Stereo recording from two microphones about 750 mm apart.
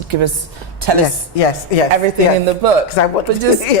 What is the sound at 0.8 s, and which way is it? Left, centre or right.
Speech, right.